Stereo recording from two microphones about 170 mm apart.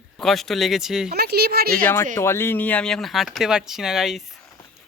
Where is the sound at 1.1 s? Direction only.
70° right (ahead or behind).